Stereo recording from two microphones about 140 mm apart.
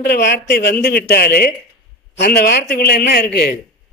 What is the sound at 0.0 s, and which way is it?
A man's voice, 90° left.